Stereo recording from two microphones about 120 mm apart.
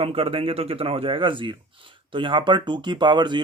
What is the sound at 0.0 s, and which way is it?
Speech, 50° right (ahead or behind).